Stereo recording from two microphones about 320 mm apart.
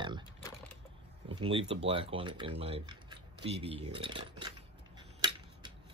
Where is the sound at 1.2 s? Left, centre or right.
Centre.